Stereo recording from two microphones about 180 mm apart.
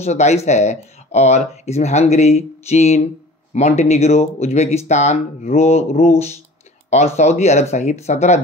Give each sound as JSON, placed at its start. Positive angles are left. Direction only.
{"t": 0.0, "sound": "speech", "side_deg": 40}